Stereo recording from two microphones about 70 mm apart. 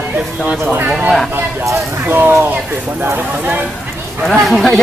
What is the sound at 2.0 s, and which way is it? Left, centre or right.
Speech, right.